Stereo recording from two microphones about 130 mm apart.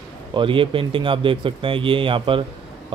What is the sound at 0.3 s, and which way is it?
Speech, 40° right (ahead or behind).